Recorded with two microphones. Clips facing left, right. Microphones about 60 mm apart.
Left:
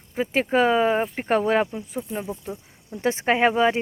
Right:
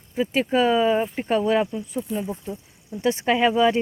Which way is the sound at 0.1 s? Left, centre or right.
Left.